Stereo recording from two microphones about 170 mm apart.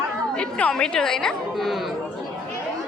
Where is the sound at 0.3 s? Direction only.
5° left (ahead or behind).